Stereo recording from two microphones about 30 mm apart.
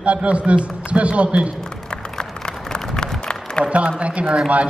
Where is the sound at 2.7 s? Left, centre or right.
Left.